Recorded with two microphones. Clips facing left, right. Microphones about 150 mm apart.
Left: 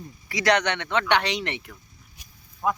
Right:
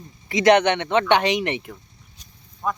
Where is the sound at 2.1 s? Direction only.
10° left (ahead or behind).